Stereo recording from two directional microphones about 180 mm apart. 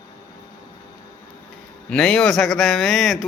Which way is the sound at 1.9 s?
5° left (ahead or behind).